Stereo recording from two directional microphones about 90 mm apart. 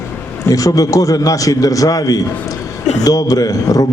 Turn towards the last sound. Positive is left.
turn(degrees=40)  # may be behind; listen again after turning